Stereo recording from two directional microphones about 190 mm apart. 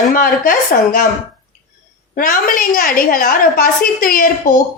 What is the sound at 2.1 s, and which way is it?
A woman's voice, 45° left (ahead or behind).